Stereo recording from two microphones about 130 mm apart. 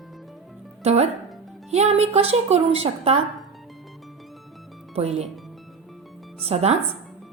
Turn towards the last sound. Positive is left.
turn(degrees=-55)  # may be behind; listen again after turning